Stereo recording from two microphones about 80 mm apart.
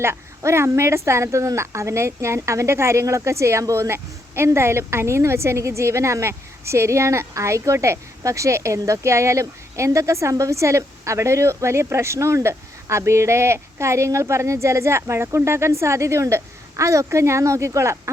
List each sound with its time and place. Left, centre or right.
0.0 s speech: right